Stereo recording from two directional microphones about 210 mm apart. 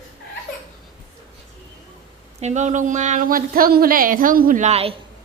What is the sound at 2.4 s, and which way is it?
Speech, 35° right (ahead or behind).